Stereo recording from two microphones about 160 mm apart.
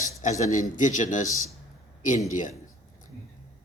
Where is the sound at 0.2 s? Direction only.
45° left (ahead or behind).